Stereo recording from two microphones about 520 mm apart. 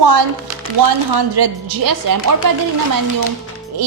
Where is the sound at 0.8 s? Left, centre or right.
Right.